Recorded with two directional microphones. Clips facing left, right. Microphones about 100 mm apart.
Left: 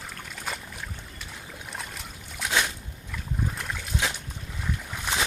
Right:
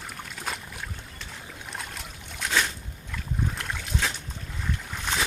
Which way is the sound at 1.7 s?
Centre (ahead or behind).